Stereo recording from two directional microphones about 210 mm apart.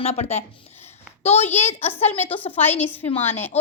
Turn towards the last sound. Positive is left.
turn(degrees=10)  # may be behind; listen again after turning